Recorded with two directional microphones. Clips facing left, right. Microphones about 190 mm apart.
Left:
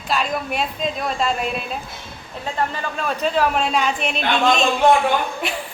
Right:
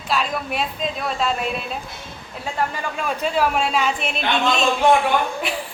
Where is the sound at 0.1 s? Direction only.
Centre (ahead or behind).